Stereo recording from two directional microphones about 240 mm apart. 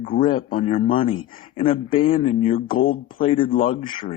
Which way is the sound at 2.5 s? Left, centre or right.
Left.